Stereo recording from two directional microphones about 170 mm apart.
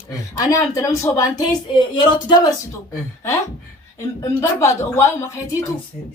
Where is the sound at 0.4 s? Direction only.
20° left (ahead or behind).